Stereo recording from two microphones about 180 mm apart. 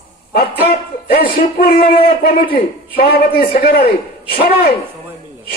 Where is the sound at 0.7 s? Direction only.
55° left (ahead or behind).